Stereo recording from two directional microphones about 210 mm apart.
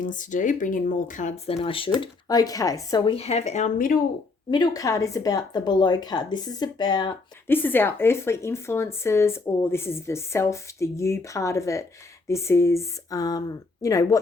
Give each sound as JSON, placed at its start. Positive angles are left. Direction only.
{"t": 0.0, "sound": "speech", "side_deg": 40}
{"t": 1.6, "sound": "speech", "side_deg": 25}
{"t": 4.5, "sound": "speech", "side_deg": 20}